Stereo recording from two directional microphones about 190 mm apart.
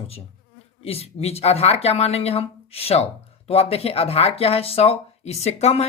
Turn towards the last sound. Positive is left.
turn(degrees=35)  # may be behind; listen again after turning